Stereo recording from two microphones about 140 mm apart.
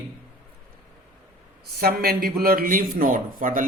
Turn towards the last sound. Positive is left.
turn(degrees=-80)